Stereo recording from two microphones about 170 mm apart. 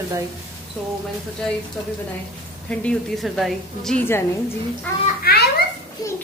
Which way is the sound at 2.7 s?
5° left (ahead or behind).